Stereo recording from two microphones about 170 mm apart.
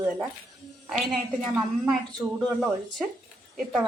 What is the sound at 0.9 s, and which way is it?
Speech, centre (ahead or behind).